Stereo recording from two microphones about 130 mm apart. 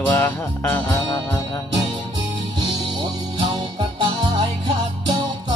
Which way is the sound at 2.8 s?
40° right (ahead or behind).